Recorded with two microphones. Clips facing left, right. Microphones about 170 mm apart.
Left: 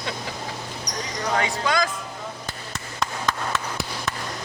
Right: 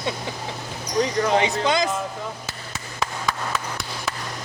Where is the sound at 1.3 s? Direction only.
20° right (ahead or behind).